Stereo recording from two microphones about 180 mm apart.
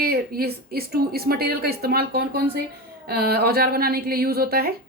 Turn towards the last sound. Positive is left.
turn(degrees=-55)  # may be behind; listen again after turning